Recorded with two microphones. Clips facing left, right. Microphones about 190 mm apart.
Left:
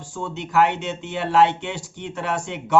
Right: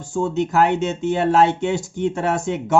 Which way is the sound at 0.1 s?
45° right (ahead or behind).